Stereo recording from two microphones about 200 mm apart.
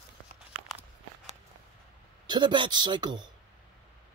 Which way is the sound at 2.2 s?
20° right (ahead or behind).